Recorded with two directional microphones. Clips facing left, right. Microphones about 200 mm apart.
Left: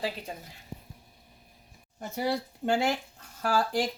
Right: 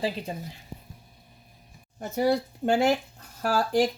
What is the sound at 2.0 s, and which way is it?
Speech, 45° right (ahead or behind).